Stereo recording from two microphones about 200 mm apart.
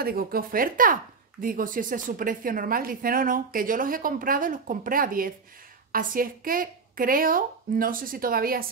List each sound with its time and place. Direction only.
0.0 s a woman's voice: 50° right (ahead or behind)